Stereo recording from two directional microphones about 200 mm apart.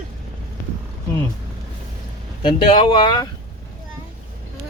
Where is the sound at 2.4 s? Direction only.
25° left (ahead or behind).